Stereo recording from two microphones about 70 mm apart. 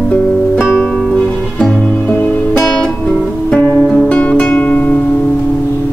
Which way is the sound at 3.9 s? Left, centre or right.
Centre.